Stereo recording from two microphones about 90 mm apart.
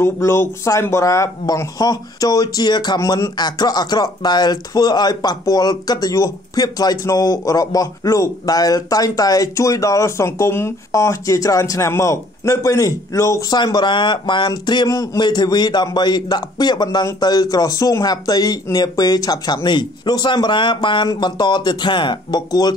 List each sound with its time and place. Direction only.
0.0 s speech: 30° left (ahead or behind); by 3.0 s 50° left (ahead or behind)
3.0 s speech: 35° left (ahead or behind)
3.3 s speech: 50° left (ahead or behind); by 13.5 s 35° left (ahead or behind)
13.5 s speech: 50° left (ahead or behind)
14.9 s speech: 35° left (ahead or behind)
15.2 s speech: 50° left (ahead or behind)